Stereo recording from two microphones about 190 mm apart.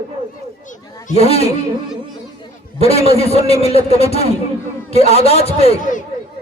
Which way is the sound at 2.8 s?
30° left (ahead or behind).